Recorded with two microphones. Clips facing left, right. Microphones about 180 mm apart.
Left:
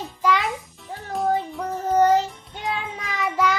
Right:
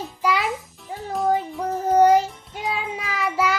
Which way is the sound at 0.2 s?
10° right (ahead or behind).